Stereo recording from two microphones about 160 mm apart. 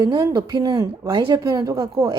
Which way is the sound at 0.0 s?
20° right (ahead or behind).